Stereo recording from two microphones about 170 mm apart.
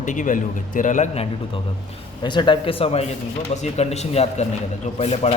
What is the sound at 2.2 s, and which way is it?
A man's voice, 25° left (ahead or behind).